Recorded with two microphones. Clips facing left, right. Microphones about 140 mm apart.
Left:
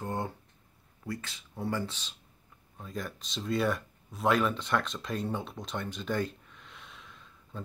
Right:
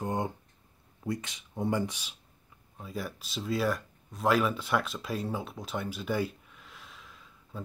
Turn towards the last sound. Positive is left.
turn(degrees=-5)  # may be behind; listen again after turning